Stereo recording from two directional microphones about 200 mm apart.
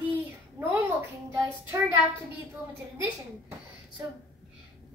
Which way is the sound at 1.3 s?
15° right (ahead or behind).